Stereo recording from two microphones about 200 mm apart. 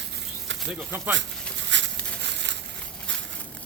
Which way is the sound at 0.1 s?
65° right (ahead or behind).